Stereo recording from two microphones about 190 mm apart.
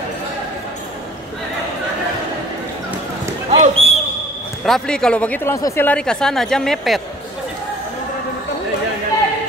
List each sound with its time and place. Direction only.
3.4 s basketball bounce: 35° right (ahead or behind)
4.6 s speech: centre (ahead or behind)